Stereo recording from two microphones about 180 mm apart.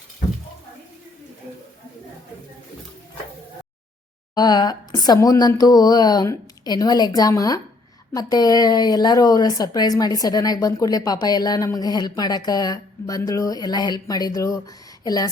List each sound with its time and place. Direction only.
4.4 s a woman's voice: 20° left (ahead or behind)